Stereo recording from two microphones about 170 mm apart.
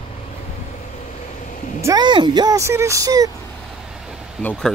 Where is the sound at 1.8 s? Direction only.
20° right (ahead or behind).